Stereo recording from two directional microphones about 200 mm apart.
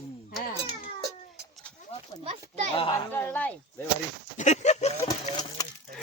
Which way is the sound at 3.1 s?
10° left (ahead or behind).